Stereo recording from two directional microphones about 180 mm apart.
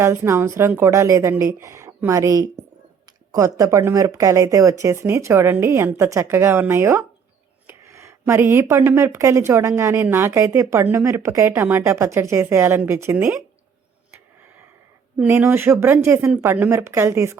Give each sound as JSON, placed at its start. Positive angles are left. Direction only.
{"t": 0.0, "sound": "speech", "side_deg": -15}
{"t": 15.2, "sound": "speech", "side_deg": -10}